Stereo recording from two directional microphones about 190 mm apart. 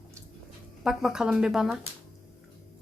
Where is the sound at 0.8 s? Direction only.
Centre (ahead or behind).